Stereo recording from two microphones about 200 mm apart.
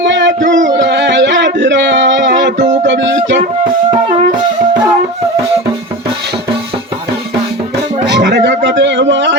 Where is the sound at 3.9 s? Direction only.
25° right (ahead or behind).